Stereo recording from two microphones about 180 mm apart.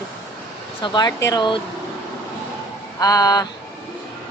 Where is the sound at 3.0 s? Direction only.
20° left (ahead or behind).